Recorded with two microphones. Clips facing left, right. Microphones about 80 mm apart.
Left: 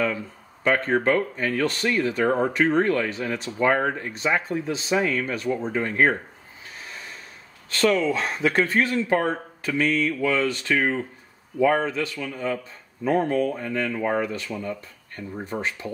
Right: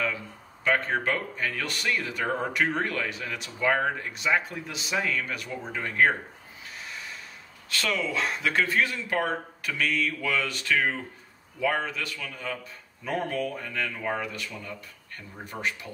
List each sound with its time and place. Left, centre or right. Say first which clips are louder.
1.0 s speech: left 7 dB; left
7.7 s speech: left 8 dB; left